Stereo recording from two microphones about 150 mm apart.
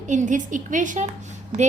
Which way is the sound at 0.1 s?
55° right (ahead or behind).